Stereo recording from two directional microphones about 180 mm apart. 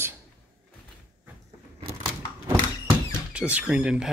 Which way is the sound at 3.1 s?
5° right (ahead or behind).